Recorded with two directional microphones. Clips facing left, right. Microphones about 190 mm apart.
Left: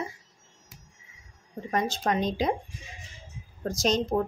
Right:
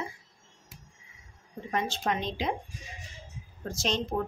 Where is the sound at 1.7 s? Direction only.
40° left (ahead or behind).